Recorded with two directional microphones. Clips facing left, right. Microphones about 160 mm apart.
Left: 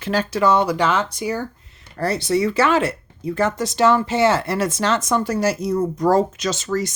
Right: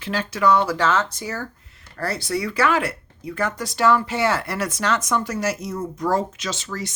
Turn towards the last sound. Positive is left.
turn(degrees=40)  # may be behind; listen again after turning